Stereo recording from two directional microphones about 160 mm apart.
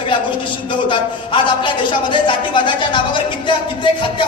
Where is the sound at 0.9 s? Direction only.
30° left (ahead or behind).